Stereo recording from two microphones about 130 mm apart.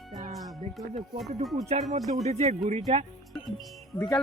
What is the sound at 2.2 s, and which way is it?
Speech, 60° right (ahead or behind).